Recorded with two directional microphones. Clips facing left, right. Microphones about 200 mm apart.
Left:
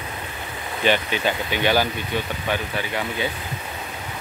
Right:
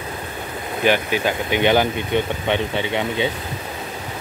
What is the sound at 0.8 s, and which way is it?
Speech, 10° right (ahead or behind).